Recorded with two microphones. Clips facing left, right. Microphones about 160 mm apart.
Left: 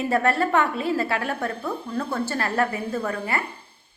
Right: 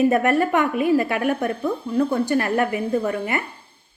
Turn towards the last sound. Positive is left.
turn(degrees=-20)  # may be behind; listen again after turning